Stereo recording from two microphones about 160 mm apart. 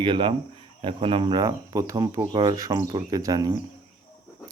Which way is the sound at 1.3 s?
20° right (ahead or behind).